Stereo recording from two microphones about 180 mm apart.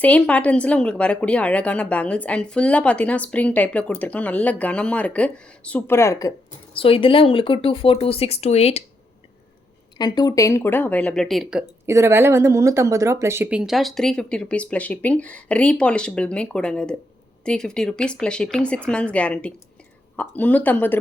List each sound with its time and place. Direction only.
0.0 s a woman's voice: 10° left (ahead or behind)
6.7 s speech: 30° left (ahead or behind)
10.0 s a woman's voice: 20° left (ahead or behind); by 11.6 s centre (ahead or behind)
11.9 s a woman's voice: 15° right (ahead or behind); by 21.0 s 10° left (ahead or behind)